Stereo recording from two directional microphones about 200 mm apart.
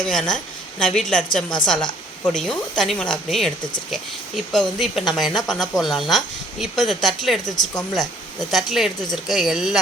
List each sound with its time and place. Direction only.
0.0 s speech: 5° left (ahead or behind)